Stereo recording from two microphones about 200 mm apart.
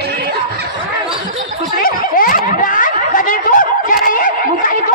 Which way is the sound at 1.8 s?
45° left (ahead or behind).